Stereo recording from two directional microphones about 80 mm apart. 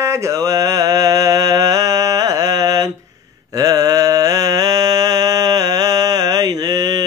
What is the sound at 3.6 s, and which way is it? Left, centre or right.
Mantra, right.